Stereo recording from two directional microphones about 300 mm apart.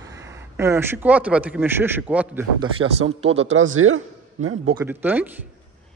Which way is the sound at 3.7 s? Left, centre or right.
Right.